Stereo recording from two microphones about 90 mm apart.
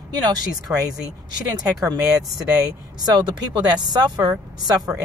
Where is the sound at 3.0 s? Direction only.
50° right (ahead or behind).